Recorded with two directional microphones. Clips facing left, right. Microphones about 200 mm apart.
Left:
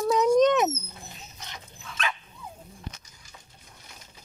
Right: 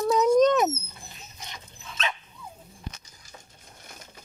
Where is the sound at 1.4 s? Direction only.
20° right (ahead or behind).